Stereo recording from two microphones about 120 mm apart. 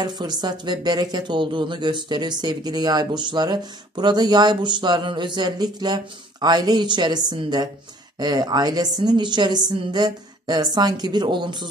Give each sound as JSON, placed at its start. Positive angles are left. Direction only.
{"t": 0.0, "sound": "speech", "side_deg": -35}